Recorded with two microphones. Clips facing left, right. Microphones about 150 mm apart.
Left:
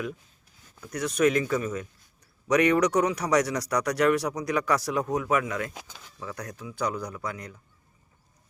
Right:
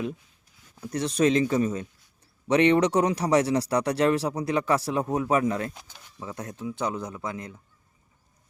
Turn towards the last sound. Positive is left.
turn(degrees=-25)  # may be behind; listen again after turning